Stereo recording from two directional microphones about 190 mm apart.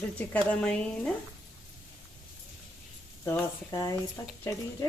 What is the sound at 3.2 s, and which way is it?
Speech, 15° left (ahead or behind).